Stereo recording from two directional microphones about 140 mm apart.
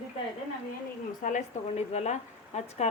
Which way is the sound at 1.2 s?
60° left (ahead or behind).